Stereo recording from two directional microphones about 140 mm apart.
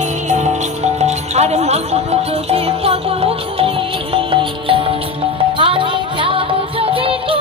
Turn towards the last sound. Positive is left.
turn(degrees=-40)  # may be behind; listen again after turning